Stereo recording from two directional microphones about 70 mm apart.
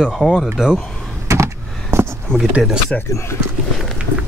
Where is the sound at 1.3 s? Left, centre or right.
Right.